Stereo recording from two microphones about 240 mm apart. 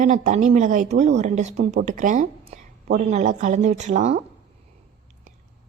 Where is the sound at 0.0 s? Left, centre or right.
Right.